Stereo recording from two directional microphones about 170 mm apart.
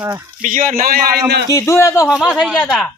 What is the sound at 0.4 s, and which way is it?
A man's voice, 50° right (ahead or behind).